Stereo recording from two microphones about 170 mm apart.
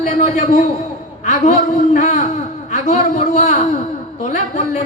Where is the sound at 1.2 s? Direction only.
45° left (ahead or behind).